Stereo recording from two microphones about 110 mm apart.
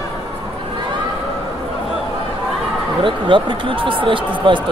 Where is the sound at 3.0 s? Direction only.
50° right (ahead or behind).